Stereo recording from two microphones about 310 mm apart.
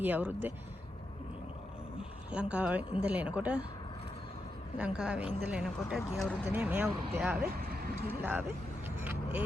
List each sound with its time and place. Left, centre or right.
0.0 s speech: centre
2.3 s speech: centre
4.8 s speech: centre
7.4 s vehicle: right
8.0 s speech: centre